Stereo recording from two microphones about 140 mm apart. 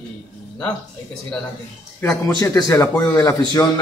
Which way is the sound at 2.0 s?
25° left (ahead or behind).